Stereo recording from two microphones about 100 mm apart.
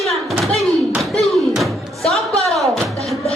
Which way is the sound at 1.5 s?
Centre (ahead or behind).